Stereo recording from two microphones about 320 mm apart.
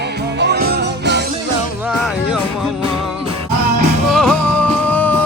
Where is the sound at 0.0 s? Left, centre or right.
Right.